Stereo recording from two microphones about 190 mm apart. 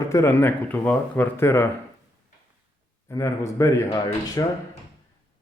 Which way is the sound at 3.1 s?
15° left (ahead or behind).